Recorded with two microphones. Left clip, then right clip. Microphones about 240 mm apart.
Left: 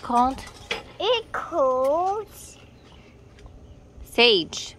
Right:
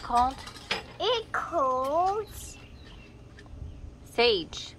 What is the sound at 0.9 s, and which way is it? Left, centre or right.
A child's voice, left.